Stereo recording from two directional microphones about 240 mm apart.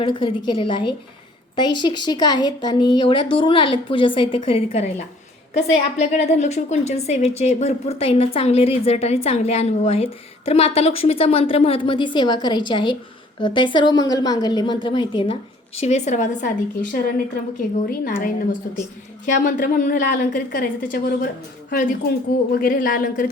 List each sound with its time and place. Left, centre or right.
0.0 s a woman's voice: left